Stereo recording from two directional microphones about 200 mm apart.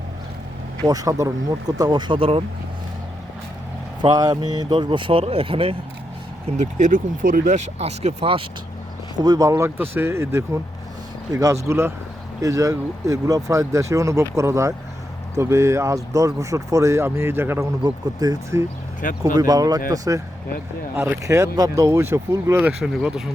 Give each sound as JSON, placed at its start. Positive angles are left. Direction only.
{"t": 0.9, "sound": "speech", "side_deg": -15}
{"t": 4.0, "sound": "speech", "side_deg": -20}
{"t": 6.6, "sound": "speech", "side_deg": -40}
{"t": 11.7, "sound": "speech", "side_deg": -10}
{"t": 19.0, "sound": "speech", "side_deg": 45}
{"t": 19.4, "sound": "speech", "side_deg": -20}